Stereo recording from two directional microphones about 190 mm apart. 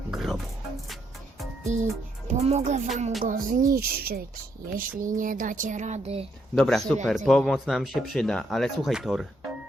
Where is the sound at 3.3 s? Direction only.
45° right (ahead or behind).